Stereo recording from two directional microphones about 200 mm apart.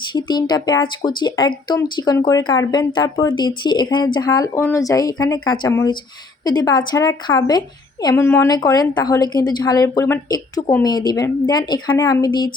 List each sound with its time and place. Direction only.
0.1 s speech: 20° left (ahead or behind)